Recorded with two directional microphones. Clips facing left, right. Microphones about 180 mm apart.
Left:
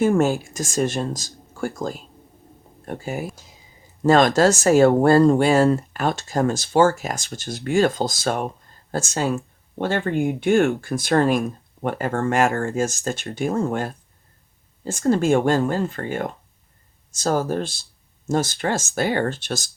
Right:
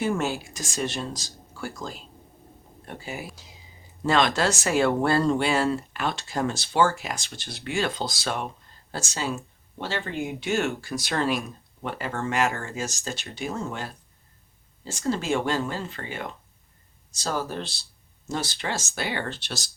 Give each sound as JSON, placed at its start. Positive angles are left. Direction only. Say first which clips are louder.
{"t": 0.0, "sound": "speech", "louder": "left 8 dB", "side_deg": 45}